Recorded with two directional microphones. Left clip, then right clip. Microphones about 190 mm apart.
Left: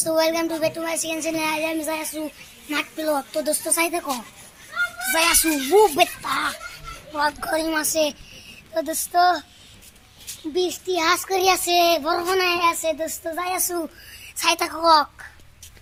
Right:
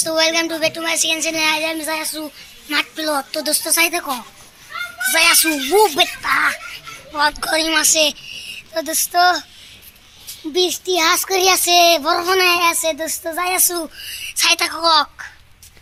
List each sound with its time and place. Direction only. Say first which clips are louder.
0.0 s speech: right 4 dB; centre (ahead or behind)
5.7 s a child's voice: right 2 dB; 15° right (ahead or behind)
6.0 s speech: right 5 dB; centre (ahead or behind)
7.1 s a woman's voice: right 5 dB; 15° right (ahead or behind)
10.5 s child singing: right 6 dB; 40° right (ahead or behind)
13.7 s speech: right 4 dB; 10° right (ahead or behind)
14.4 s a woman's voice: right 3 dB; 10° left (ahead or behind)